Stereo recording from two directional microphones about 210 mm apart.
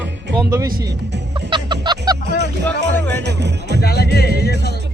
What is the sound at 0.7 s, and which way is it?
Speech, 55° right (ahead or behind).